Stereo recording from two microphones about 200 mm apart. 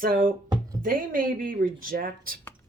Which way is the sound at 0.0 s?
45° right (ahead or behind).